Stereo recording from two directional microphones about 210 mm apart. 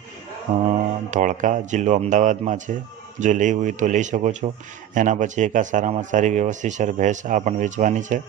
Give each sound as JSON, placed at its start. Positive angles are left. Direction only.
{"t": 0.7, "sound": "speech", "side_deg": -35}